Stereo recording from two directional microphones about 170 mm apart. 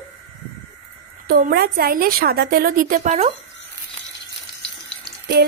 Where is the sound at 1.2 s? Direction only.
65° right (ahead or behind); by 3.3 s 40° right (ahead or behind).